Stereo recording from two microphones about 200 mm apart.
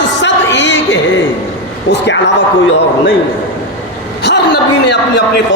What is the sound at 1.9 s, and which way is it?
Speech, 60° left (ahead or behind).